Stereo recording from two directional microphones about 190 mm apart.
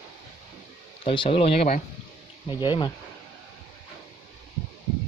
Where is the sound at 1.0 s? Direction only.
25° left (ahead or behind).